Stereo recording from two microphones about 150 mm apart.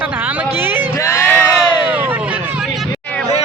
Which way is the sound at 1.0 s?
15° left (ahead or behind).